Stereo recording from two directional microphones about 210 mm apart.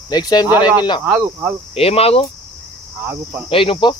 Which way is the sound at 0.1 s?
20° left (ahead or behind).